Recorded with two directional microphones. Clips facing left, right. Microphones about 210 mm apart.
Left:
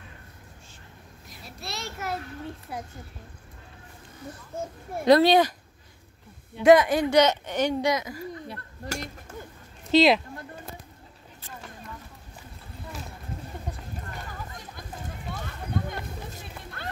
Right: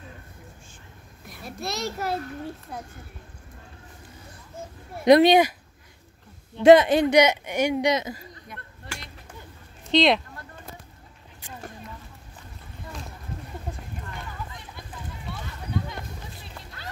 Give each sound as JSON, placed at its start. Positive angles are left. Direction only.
{"t": 1.2, "sound": "a child's voice", "side_deg": -55}
{"t": 2.7, "sound": "speech", "side_deg": 10}
{"t": 5.0, "sound": "speech", "side_deg": -15}
{"t": 6.6, "sound": "speech", "side_deg": -25}
{"t": 7.9, "sound": "speech", "side_deg": -25}
{"t": 8.5, "sound": "a sound", "side_deg": 40}
{"t": 9.8, "sound": "speech", "side_deg": 5}
{"t": 15.3, "sound": "a sound", "side_deg": 50}